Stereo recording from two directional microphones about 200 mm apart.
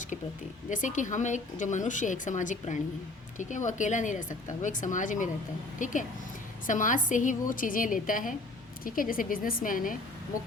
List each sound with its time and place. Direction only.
0.7 s a woman's voice: 40° left (ahead or behind)